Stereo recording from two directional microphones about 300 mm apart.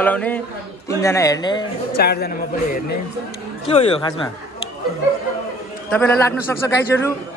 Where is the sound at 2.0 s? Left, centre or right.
Left.